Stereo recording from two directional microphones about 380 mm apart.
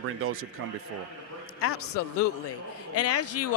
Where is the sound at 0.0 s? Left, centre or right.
Right.